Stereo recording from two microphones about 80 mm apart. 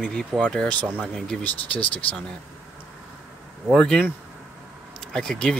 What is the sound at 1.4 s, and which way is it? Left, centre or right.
Speech, left.